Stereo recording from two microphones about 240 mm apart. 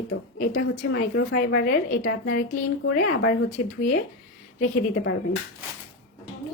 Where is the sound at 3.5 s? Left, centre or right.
Left.